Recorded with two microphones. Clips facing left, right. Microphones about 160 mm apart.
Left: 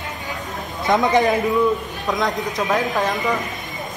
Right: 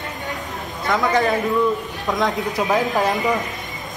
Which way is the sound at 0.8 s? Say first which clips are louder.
Left 2 dB; 20° left (ahead or behind).